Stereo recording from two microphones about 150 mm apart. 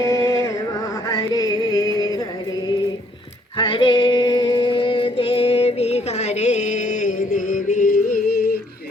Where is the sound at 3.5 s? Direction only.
35° left (ahead or behind); by 7.9 s 60° left (ahead or behind).